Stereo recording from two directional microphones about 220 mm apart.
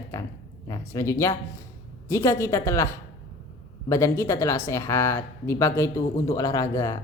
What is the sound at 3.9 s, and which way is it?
Speech, 15° left (ahead or behind).